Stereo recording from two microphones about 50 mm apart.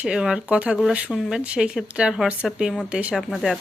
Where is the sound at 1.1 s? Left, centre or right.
Centre.